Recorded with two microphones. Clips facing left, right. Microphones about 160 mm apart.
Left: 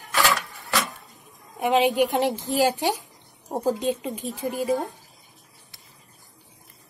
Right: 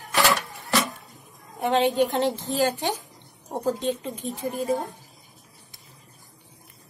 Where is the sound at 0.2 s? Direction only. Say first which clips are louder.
Right 1 dB; 40° right (ahead or behind).